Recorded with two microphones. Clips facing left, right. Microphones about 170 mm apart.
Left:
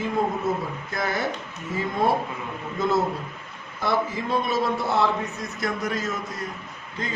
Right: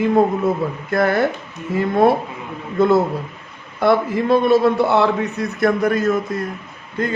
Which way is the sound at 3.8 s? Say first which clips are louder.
Right 9 dB; 60° right (ahead or behind).